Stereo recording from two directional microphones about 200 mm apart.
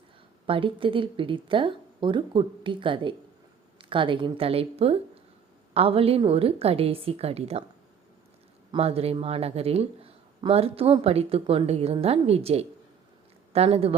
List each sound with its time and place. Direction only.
0.4 s speech: 25° right (ahead or behind)
8.7 s speech: 30° right (ahead or behind)